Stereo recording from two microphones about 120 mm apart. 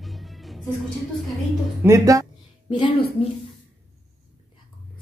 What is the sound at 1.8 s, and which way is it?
Speech, 25° right (ahead or behind).